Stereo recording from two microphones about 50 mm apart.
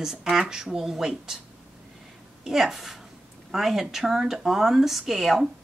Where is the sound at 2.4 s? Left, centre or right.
Centre.